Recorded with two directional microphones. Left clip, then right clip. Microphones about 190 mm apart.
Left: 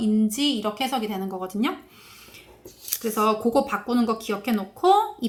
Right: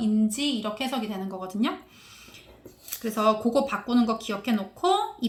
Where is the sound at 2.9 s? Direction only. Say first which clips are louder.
Left 1 dB; 20° left (ahead or behind).